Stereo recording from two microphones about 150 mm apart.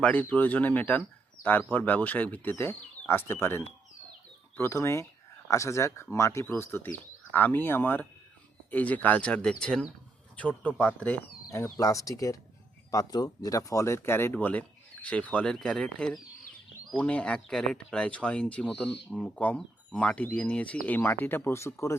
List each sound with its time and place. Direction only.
0.0 s speech: 10° left (ahead or behind)
11.5 s speech: 20° left (ahead or behind)